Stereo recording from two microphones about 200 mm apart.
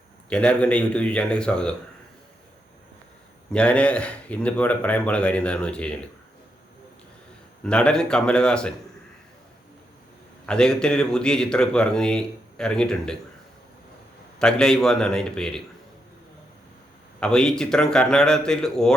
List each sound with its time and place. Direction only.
0.3 s a man's voice: 5° left (ahead or behind)
3.5 s a man's voice: 5° left (ahead or behind)
7.6 s a man's voice: 5° left (ahead or behind)
10.4 s a man's voice: 5° left (ahead or behind)
14.3 s a man's voice: 5° left (ahead or behind)
17.2 s a man's voice: 5° left (ahead or behind)